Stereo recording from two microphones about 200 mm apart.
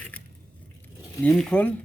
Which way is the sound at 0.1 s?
5° left (ahead or behind).